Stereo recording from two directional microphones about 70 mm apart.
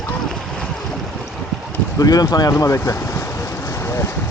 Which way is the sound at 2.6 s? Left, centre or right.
Left.